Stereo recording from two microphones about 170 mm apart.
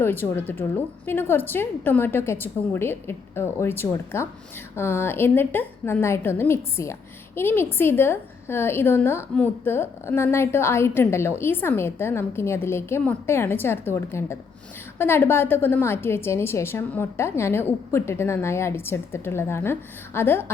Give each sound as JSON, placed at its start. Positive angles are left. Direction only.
{"t": 0.0, "sound": "a woman's voice", "side_deg": 10}